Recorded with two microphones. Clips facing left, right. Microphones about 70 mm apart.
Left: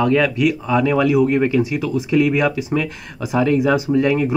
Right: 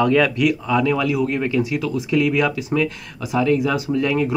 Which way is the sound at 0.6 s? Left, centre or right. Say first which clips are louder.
Left 3 dB; left.